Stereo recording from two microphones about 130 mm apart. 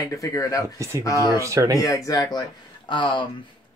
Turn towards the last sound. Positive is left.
turn(degrees=35)  # may be behind; listen again after turning